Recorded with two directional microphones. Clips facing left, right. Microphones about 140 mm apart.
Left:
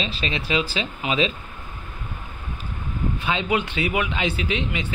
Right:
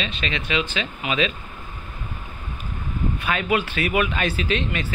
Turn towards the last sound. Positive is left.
turn(degrees=15)  # may be behind; listen again after turning